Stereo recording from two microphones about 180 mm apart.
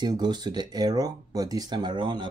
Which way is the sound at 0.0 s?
25° right (ahead or behind).